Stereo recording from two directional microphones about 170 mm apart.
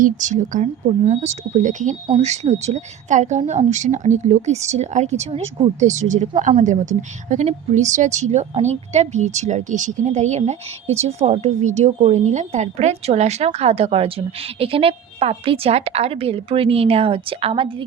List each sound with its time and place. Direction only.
0.0 s a woman's voice: 45° right (ahead or behind); by 17.8 s 30° right (ahead or behind)